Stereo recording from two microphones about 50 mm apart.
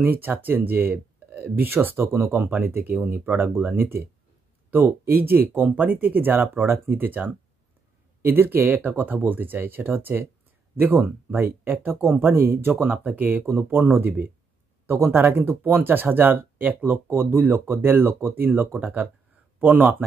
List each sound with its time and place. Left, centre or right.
0.0 s speech: right
13.5 s speech: right